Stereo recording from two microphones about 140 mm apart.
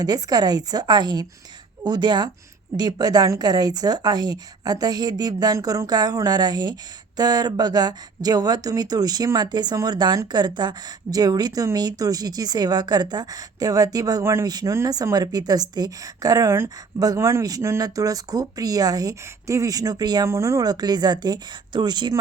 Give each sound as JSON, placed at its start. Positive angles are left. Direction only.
{"t": 0.0, "sound": "speech", "side_deg": -30}